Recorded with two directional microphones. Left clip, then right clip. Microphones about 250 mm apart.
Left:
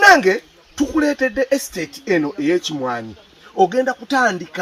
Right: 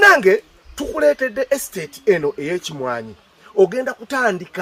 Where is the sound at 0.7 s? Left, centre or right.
Centre.